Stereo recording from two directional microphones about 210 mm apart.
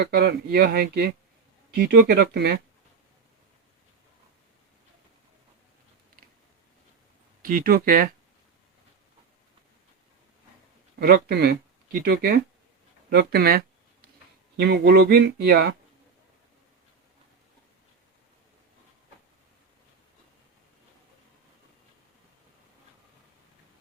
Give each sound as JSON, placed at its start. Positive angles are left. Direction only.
{"t": 0.0, "sound": "speech", "side_deg": -50}
{"t": 7.4, "sound": "speech", "side_deg": -45}
{"t": 11.0, "sound": "speech", "side_deg": -50}